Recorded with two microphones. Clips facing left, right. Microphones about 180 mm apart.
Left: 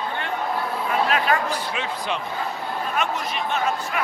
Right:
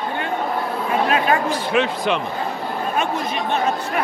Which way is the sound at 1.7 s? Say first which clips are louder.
Right 8 dB; 75° right (ahead or behind).